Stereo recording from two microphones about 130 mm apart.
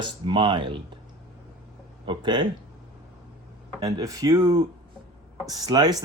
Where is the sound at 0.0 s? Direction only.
40° right (ahead or behind).